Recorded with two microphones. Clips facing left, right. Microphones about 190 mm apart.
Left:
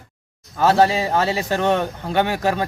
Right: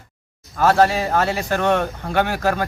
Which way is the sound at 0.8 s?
25° left (ahead or behind).